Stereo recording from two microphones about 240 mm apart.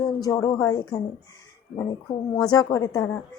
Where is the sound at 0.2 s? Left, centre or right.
Centre.